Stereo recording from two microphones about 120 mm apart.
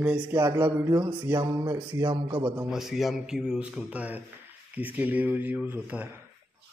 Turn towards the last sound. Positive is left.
turn(degrees=-15)  # may be behind; listen again after turning